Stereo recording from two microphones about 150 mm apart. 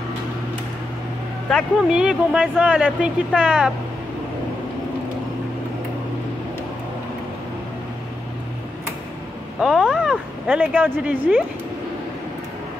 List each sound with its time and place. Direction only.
1.5 s speech: 5° right (ahead or behind)
9.6 s speech: 5° right (ahead or behind)